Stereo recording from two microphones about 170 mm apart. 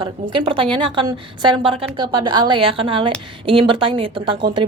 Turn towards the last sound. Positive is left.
turn(degrees=-30)  # may be behind; listen again after turning